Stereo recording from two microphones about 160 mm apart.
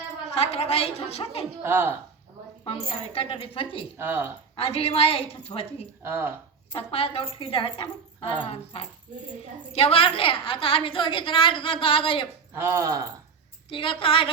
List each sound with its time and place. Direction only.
0.3 s a woman's voice: 40° left (ahead or behind)
1.6 s speech: 15° right (ahead or behind)
2.6 s a woman's voice: 35° left (ahead or behind)
3.9 s speech: 15° right (ahead or behind)
4.5 s a woman's voice: 35° left (ahead or behind)
6.0 s speech: 15° right (ahead or behind)
6.7 s a woman's voice: 35° left (ahead or behind)
12.5 s speech: 15° right (ahead or behind)
13.7 s a woman's voice: 35° left (ahead or behind)